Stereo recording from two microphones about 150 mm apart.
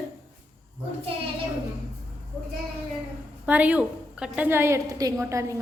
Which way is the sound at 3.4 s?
10° right (ahead or behind).